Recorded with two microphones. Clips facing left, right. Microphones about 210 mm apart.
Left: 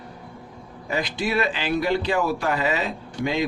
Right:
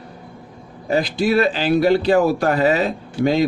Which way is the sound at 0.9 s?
35° right (ahead or behind).